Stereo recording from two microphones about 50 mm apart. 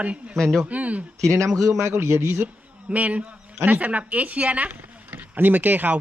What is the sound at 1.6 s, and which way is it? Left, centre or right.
Speech, right.